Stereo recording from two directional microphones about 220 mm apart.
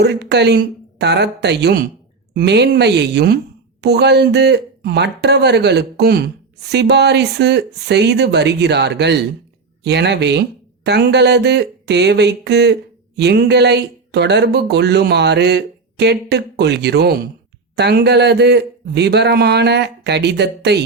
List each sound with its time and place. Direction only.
0.0 s speech: 50° right (ahead or behind)